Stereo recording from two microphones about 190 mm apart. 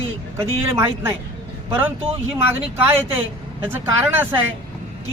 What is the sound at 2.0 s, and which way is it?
Speech, 30° right (ahead or behind).